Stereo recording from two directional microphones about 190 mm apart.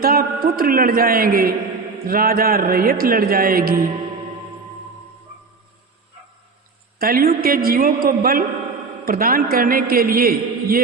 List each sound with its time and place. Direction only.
0.0 s a man's voice: 50° right (ahead or behind)
7.0 s a man's voice: 50° right (ahead or behind)